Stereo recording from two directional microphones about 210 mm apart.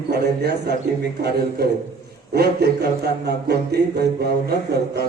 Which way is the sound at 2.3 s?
50° right (ahead or behind).